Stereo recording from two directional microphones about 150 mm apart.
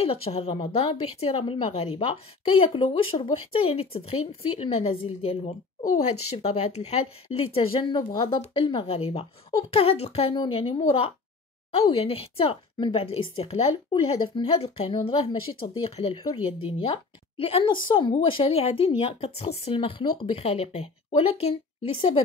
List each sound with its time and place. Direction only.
0.0 s a woman's voice: 40° left (ahead or behind)
7.5 s a woman's voice: 35° left (ahead or behind)